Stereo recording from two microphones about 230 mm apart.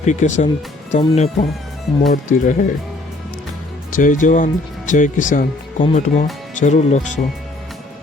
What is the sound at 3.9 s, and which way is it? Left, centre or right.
Speech, left.